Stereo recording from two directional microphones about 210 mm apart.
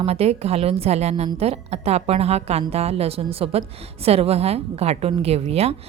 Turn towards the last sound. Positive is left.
turn(degrees=-30)  # may be behind; listen again after turning